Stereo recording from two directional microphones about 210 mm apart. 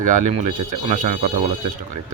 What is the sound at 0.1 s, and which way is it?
Speech, 35° right (ahead or behind).